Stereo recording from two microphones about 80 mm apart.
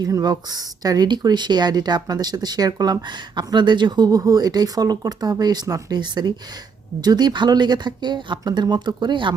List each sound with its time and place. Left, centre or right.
0.0 s speech: right
6.0 s speech: right